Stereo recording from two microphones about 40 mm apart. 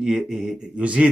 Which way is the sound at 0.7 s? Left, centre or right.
Right.